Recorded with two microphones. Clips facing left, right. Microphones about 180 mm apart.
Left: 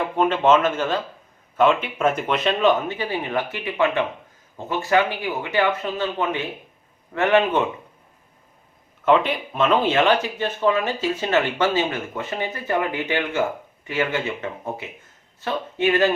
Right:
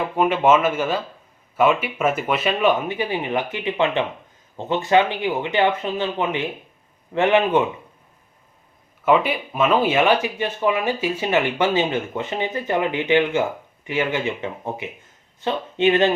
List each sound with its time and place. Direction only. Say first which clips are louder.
0.0 s speech: right 1 dB; 10° right (ahead or behind)
9.0 s speech: even; 5° right (ahead or behind)